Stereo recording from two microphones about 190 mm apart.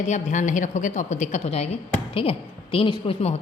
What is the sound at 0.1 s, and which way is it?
A woman's voice, 40° left (ahead or behind).